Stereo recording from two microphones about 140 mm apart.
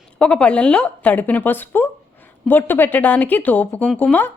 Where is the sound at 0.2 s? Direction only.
10° left (ahead or behind).